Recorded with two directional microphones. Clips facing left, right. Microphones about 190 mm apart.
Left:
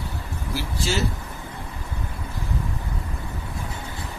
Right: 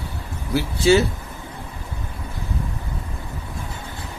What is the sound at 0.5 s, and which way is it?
Speech, 60° right (ahead or behind).